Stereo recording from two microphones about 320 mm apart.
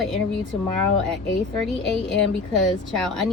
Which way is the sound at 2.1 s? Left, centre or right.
Centre.